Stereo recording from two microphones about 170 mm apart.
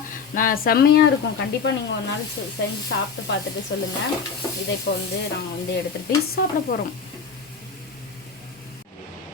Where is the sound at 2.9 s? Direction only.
90° left.